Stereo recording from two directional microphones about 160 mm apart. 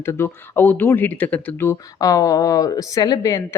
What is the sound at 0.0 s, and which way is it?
Speech, 15° left (ahead or behind).